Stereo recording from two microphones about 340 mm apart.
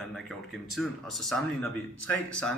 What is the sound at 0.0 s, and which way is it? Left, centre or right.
Speech, centre.